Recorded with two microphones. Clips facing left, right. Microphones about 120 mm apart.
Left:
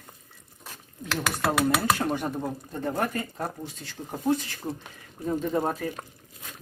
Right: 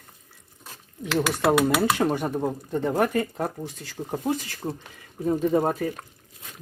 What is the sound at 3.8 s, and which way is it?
Speech, centre (ahead or behind).